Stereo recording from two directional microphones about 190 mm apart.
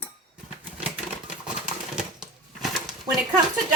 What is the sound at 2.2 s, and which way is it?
Bird, centre (ahead or behind).